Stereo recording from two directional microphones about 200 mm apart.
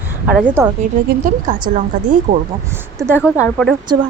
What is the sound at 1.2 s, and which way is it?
Speech, 40° right (ahead or behind).